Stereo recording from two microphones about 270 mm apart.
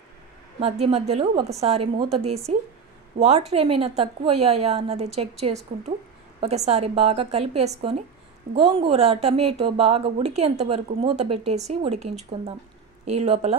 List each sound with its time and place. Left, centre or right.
0.6 s a woman's voice: right